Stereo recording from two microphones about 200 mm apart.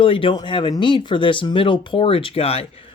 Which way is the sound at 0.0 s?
25° left (ahead or behind).